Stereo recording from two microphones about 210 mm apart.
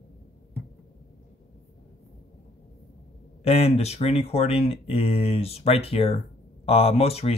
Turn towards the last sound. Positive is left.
turn(degrees=30)  # may be behind; listen again after turning